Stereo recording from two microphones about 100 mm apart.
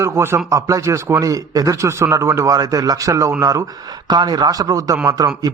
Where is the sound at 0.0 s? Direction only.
25° right (ahead or behind).